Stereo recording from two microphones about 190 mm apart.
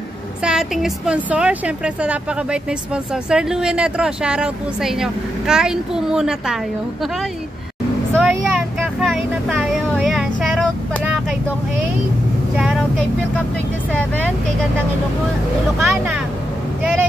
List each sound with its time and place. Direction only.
0.4 s a woman's voice: 5° right (ahead or behind)
8.1 s vehicle: centre (ahead or behind)
12.5 s vehicle: centre (ahead or behind)
15.8 s a sound: centre (ahead or behind)